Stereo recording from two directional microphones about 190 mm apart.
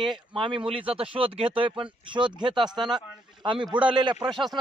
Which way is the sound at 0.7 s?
30° right (ahead or behind).